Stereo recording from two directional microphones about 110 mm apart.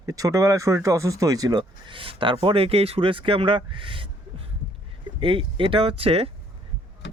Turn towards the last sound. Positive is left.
turn(degrees=-65)  # may be behind; listen again after turning